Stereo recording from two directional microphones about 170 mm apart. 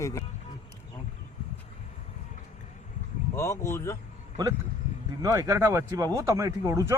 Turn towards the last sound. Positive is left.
turn(degrees=-15)  # may be behind; listen again after turning